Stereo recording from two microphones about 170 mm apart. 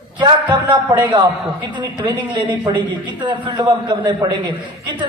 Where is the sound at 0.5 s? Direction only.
30° right (ahead or behind).